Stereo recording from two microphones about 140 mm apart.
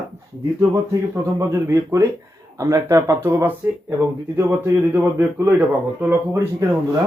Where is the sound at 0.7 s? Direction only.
20° right (ahead or behind).